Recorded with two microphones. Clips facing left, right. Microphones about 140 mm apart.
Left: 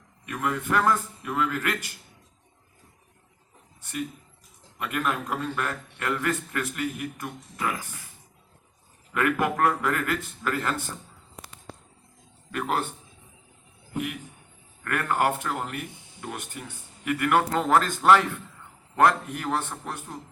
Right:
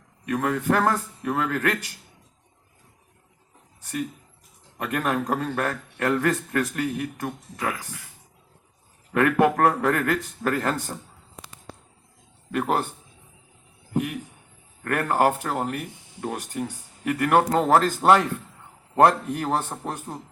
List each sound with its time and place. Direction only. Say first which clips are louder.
0.3 s speech: right 5 dB; 40° right (ahead or behind)
3.8 s a sound: right 3 dB; 35° right (ahead or behind)
4.8 s speech: right 3 dB; 40° right (ahead or behind)
9.1 s speech: right 5 dB; 35° right (ahead or behind)
12.5 s speech: right 4 dB; 35° right (ahead or behind)
13.9 s speech: right 5 dB; 35° right (ahead or behind)